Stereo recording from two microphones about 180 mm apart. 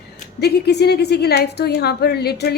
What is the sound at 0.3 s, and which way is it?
A woman's voice, 65° left (ahead or behind).